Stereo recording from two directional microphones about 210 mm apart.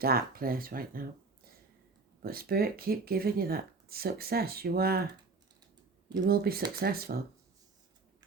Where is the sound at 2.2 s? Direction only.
45° right (ahead or behind).